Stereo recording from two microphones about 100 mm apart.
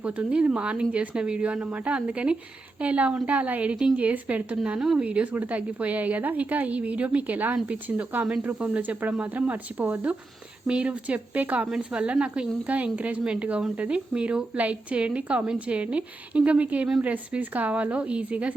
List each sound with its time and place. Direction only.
0.0 s speech: 10° right (ahead or behind)